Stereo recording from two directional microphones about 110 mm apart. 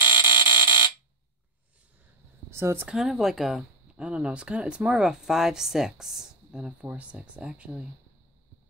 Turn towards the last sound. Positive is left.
turn(degrees=-10)  # may be behind; listen again after turning